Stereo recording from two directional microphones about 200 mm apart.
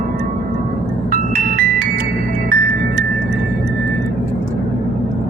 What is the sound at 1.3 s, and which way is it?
Music, 50° right (ahead or behind).